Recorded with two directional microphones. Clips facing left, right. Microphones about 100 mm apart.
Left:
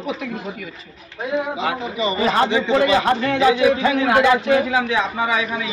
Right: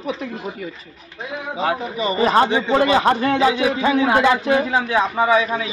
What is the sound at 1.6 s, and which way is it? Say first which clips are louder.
A man's voice: right 1 dB; 35° right (ahead or behind).